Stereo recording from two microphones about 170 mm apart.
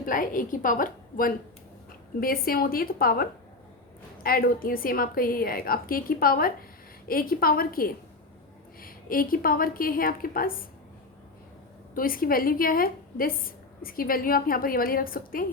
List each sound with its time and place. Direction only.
0.0 s a woman's voice: 50° left (ahead or behind)
11.9 s a woman's voice: 55° left (ahead or behind)